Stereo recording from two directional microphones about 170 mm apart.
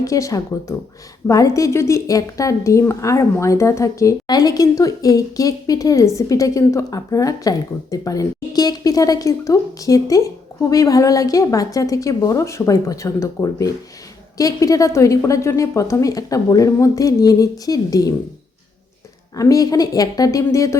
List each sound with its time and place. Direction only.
0.0 s a woman's voice: 20° left (ahead or behind)
19.4 s a woman's voice: 20° left (ahead or behind)